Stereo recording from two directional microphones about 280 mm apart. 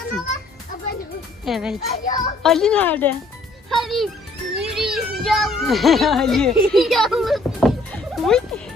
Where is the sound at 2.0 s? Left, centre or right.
Left.